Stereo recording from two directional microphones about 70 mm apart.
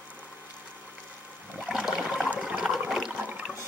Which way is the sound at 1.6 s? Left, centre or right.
Centre.